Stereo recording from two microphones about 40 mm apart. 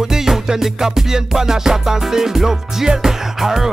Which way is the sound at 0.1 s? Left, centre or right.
Centre.